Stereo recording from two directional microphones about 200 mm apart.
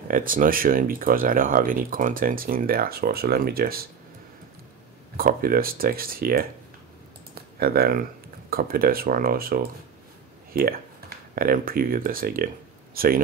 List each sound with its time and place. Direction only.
0.1 s speech: 45° right (ahead or behind)
5.1 s speech: 45° right (ahead or behind)
7.5 s speech: 50° right (ahead or behind)